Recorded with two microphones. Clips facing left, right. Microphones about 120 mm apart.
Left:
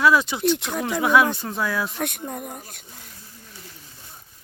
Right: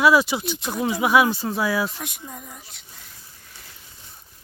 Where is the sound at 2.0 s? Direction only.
60° left (ahead or behind).